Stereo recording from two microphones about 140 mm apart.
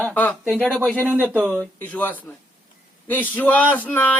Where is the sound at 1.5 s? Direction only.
10° left (ahead or behind).